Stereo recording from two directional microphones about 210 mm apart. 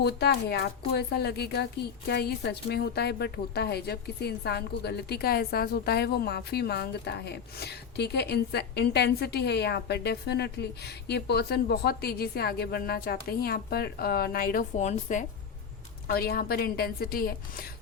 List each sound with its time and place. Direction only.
0.0 s a woman's voice: 50° left (ahead or behind); by 15.3 s 35° left (ahead or behind)
16.0 s a woman's voice: 45° left (ahead or behind)